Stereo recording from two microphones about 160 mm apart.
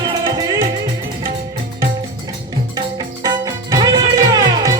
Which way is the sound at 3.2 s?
25° right (ahead or behind).